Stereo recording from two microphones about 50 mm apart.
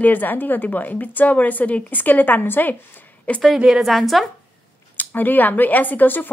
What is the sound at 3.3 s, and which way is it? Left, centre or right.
Speech, left.